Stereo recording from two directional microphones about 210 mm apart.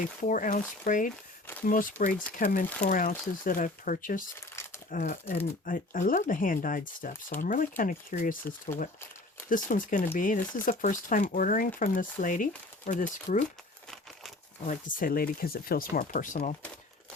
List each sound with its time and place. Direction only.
0.2 s speech: 35° left (ahead or behind)
4.4 s crumpling: 10° left (ahead or behind)
4.9 s speech: 40° left (ahead or behind)
14.7 s speech: 40° left (ahead or behind)